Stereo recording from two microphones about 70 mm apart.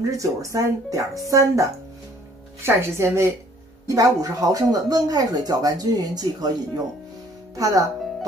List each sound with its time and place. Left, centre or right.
0.0 s a woman's voice: right
3.8 s speech: right
7.5 s speech: right